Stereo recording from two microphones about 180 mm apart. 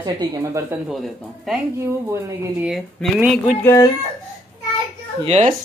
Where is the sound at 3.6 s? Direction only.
15° left (ahead or behind).